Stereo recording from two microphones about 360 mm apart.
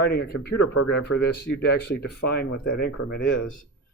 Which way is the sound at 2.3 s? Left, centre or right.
Left.